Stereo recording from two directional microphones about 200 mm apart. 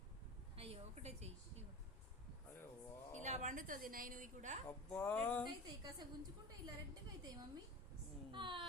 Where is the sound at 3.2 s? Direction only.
35° right (ahead or behind).